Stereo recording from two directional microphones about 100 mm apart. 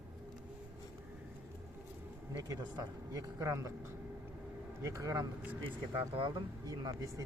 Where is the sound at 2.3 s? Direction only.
40° right (ahead or behind).